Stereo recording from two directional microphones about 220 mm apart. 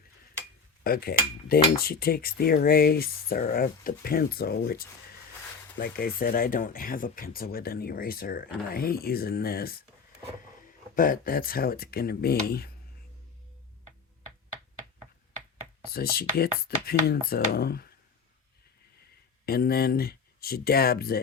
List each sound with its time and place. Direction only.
0.9 s cutlery: 45° left (ahead or behind)
10.9 s cutlery: 40° left (ahead or behind)
15.8 s cutlery: 45° left (ahead or behind)
19.5 s cutlery: 45° left (ahead or behind)